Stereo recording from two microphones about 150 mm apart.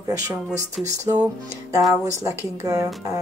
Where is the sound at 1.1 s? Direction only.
25° right (ahead or behind).